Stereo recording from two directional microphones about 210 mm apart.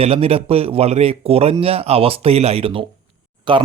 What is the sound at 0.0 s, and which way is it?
Speech, 30° right (ahead or behind).